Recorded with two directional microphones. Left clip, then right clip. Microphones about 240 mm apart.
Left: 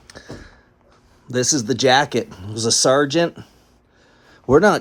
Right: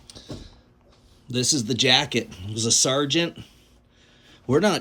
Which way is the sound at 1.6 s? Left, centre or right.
Left.